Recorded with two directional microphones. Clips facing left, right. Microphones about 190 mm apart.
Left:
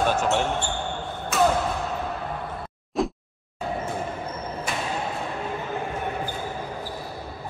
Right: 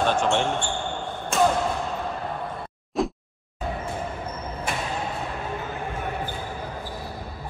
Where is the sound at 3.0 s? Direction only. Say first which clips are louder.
Even; centre (ahead or behind).